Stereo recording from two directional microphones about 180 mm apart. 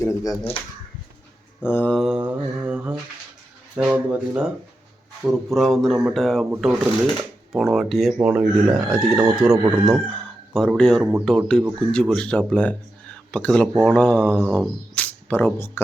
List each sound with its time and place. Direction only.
0.0 s speech: 15° left (ahead or behind)
1.6 s speech: 10° left (ahead or behind)
6.5 s speech: 10° right (ahead or behind); by 15.8 s 10° left (ahead or behind)